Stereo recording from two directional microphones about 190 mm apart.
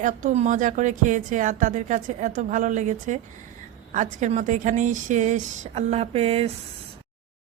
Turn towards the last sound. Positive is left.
turn(degrees=-30)  # may be behind; listen again after turning